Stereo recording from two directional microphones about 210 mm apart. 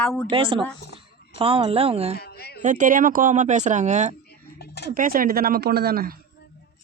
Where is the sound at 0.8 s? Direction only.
50° left (ahead or behind).